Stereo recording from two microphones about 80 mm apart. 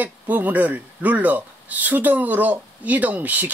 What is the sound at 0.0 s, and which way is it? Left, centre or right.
Speech, right.